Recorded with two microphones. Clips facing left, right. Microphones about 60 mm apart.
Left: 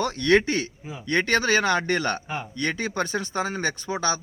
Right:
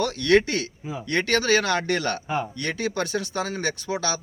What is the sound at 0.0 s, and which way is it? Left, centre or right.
Speech, left.